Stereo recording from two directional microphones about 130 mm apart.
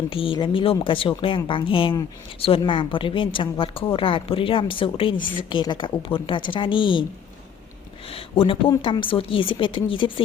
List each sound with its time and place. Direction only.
0.1 s a woman's voice: 45° left (ahead or behind)
8.1 s a woman's voice: 45° left (ahead or behind)